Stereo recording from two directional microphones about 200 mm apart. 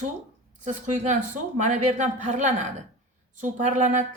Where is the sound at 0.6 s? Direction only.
40° right (ahead or behind).